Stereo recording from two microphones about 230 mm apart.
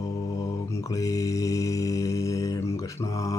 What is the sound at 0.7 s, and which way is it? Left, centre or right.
Mantra, centre.